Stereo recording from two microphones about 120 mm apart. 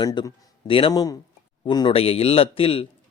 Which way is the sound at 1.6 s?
35° left (ahead or behind).